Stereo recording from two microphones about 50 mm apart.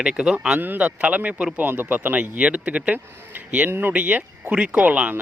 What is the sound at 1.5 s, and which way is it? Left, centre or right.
Speech, right.